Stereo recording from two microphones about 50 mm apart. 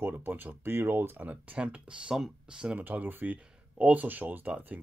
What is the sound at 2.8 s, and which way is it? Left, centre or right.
Speech, right.